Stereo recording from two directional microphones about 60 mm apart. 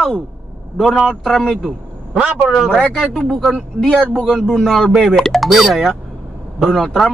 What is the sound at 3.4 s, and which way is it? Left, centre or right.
Speech, centre.